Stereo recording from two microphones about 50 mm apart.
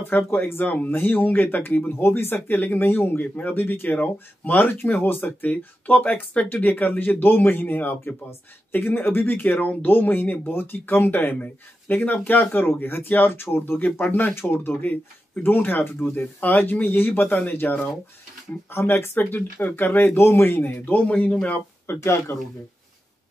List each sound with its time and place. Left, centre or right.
0.0 s speech: left
2.0 s speech: left
9.8 s speech: left
10.5 s speech: left
13.7 s speech: left
18.7 s speech: left
20.2 s speech: left
21.8 s speech: left